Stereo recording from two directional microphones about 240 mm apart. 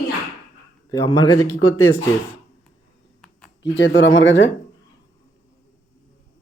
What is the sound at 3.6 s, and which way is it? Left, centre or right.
Speech, left.